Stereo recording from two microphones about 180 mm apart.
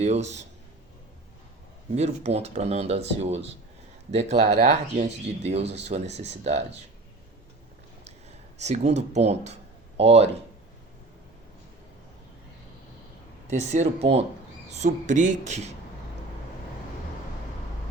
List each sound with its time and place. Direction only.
0.0 s speech: 40° right (ahead or behind)
2.0 s speech: 35° right (ahead or behind)
8.5 s speech: 40° right (ahead or behind)
13.5 s speech: 40° right (ahead or behind)